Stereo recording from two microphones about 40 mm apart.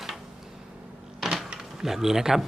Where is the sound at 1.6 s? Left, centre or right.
Centre.